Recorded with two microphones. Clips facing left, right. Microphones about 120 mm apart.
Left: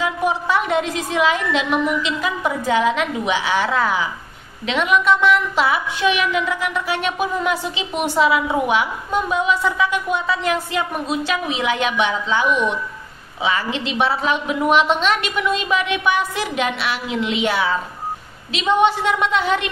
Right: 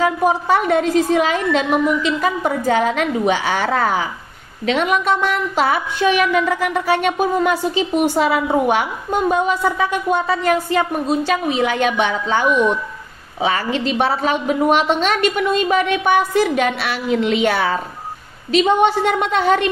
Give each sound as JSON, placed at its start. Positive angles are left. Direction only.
{"t": 0.0, "sound": "speech", "side_deg": -45}